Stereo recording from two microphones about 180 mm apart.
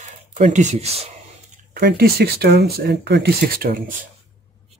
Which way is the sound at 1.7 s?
60° right (ahead or behind).